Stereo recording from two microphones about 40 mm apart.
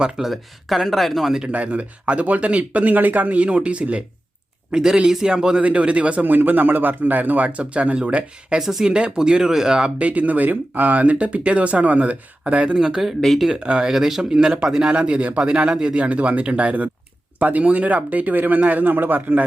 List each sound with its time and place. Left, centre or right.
0.2 s speech: centre
1.5 s speech: right
4.7 s speech: centre
5.6 s speech: right
6.2 s speech: right; by 9.9 s centre
10.0 s speech: right
12.7 s speech: centre
13.2 s speech: centre
13.5 s speech: right
13.9 s speech: centre
16.0 s speech: right